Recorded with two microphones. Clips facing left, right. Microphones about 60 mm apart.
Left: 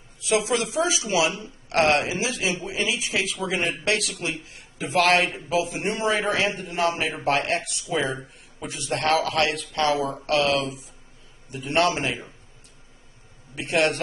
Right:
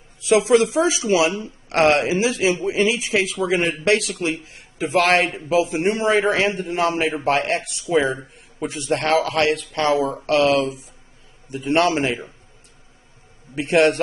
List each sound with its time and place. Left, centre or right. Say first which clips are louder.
0.4 s speech: right 10 dB; right
8.5 s speech: right 6 dB; right
11.7 s speech: right 4 dB; right
13.7 s speech: right 6 dB; right